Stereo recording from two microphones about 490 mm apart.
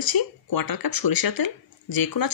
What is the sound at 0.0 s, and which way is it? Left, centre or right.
Speech, left.